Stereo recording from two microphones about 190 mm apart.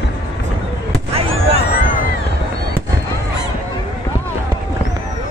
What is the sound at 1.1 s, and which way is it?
Vehicle, 30° right (ahead or behind).